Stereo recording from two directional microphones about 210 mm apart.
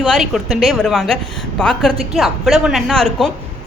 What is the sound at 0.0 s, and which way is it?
A woman's voice, centre (ahead or behind).